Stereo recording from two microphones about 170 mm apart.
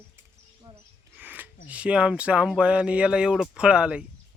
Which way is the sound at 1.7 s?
5° right (ahead or behind).